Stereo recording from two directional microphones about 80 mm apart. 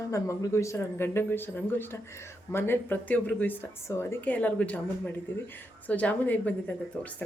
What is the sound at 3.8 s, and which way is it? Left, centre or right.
Speech, left.